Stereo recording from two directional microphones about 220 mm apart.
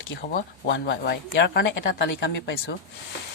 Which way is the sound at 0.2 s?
45° left (ahead or behind).